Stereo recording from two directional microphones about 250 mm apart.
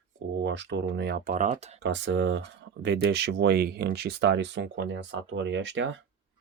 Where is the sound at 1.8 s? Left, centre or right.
Right.